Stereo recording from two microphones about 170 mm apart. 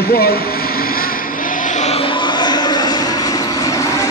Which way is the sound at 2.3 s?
25° left (ahead or behind).